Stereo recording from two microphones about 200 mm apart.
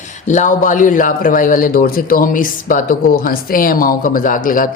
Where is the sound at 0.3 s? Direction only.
40° left (ahead or behind).